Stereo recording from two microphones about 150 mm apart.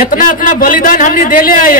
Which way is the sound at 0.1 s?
65° left (ahead or behind).